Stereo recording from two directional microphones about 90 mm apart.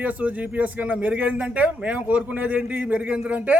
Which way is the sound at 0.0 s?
15° right (ahead or behind).